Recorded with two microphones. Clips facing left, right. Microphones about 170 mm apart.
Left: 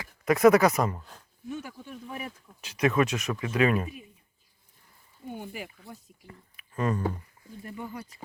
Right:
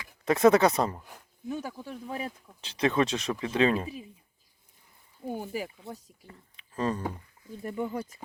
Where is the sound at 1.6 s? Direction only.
35° right (ahead or behind).